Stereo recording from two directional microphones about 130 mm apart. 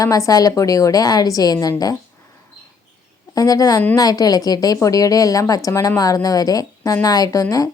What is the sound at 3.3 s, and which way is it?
A woman's voice, 25° left (ahead or behind).